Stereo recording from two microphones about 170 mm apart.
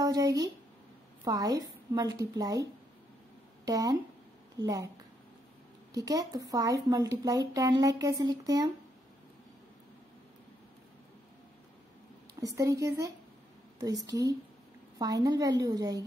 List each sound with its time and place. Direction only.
0.0 s a sound: 20° right (ahead or behind)
1.2 s speech: 20° right (ahead or behind)
5.9 s speech: 20° right (ahead or behind)
12.4 s speech: 20° right (ahead or behind)